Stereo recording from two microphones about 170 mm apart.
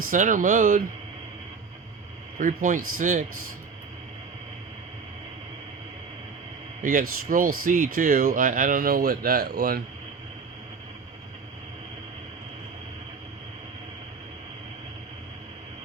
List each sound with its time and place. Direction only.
0.1 s speech: 50° right (ahead or behind)
2.4 s speech: 50° right (ahead or behind)
6.8 s speech: 55° right (ahead or behind)